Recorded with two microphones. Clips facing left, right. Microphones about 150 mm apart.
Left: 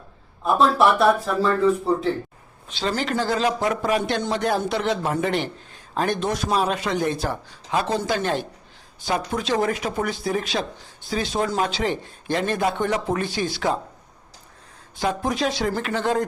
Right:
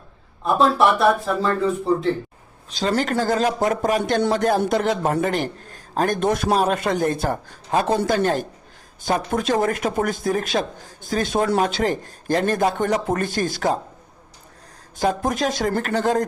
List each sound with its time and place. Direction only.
0.4 s speech: centre (ahead or behind)
2.6 s a man's voice: 40° right (ahead or behind); by 11.6 s 60° right (ahead or behind)
11.6 s a man's voice: 45° right (ahead or behind)
14.9 s a man's voice: 45° right (ahead or behind)